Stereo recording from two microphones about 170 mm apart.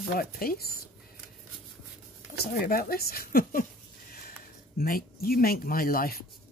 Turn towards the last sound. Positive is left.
turn(degrees=60)  # may be behind; listen again after turning